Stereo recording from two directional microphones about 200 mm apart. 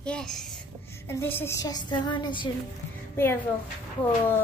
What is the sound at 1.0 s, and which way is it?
Music, 10° left (ahead or behind).